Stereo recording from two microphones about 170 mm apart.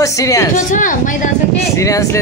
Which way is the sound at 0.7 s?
50° left (ahead or behind).